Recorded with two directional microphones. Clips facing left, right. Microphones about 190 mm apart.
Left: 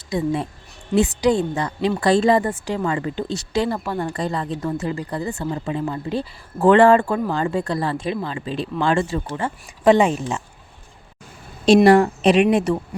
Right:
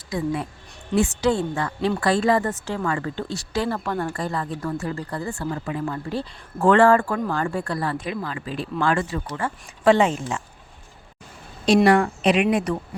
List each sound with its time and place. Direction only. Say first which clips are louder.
0.1 s a woman's voice: left 3 dB; 25° left (ahead or behind)
11.6 s speech: left 4 dB; 30° left (ahead or behind)